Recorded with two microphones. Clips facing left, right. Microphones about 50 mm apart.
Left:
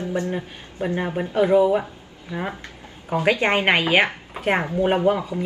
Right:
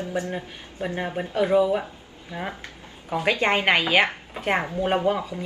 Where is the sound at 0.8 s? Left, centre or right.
Centre.